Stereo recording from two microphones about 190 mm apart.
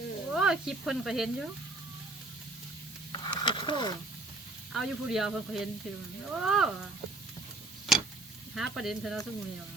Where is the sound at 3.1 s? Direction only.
20° left (ahead or behind).